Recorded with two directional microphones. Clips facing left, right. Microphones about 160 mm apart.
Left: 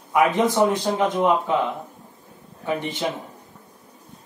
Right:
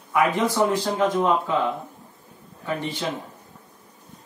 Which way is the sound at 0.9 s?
20° left (ahead or behind).